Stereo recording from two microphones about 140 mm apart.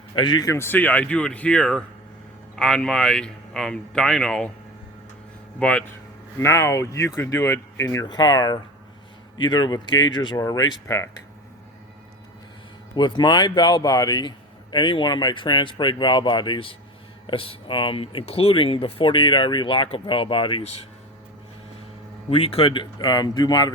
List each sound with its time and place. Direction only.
0.1 s speech: 30° left (ahead or behind); by 4.5 s 5° left (ahead or behind)
5.5 s speech: 10° left (ahead or behind)
6.4 s speech: 20° left (ahead or behind)
8.0 s a man's voice: 30° left (ahead or behind)
13.0 s a man's voice: 30° left (ahead or behind)
22.3 s a man's voice: 40° left (ahead or behind)